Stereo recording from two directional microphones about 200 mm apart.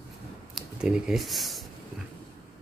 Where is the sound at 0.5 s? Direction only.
5° right (ahead or behind).